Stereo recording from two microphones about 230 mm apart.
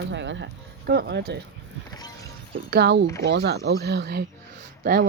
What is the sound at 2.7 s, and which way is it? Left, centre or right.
Speech, right.